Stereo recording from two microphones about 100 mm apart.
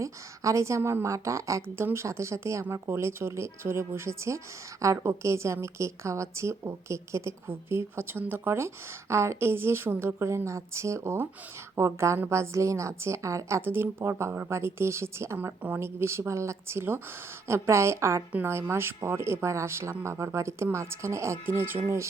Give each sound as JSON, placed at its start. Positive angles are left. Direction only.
{"t": 0.0, "sound": "a woman's voice", "side_deg": -30}